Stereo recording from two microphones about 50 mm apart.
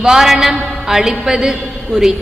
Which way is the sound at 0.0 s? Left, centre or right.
Centre.